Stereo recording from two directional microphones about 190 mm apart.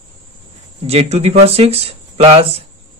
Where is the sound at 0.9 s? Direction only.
35° right (ahead or behind).